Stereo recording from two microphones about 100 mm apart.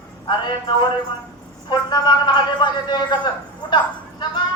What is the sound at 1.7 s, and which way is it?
Speech, 45° left (ahead or behind).